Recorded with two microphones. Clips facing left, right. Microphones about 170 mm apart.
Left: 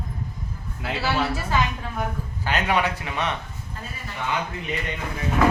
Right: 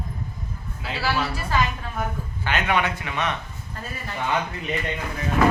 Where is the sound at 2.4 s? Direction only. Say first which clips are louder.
Even; 35° left (ahead or behind).